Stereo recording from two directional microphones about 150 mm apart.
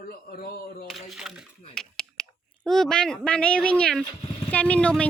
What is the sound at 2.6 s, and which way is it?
Speech, 5° left (ahead or behind).